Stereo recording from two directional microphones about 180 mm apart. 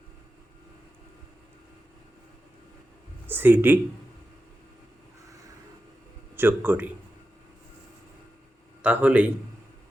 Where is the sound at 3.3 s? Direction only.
10° right (ahead or behind).